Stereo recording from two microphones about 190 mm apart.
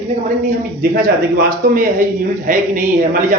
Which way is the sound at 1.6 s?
45° right (ahead or behind).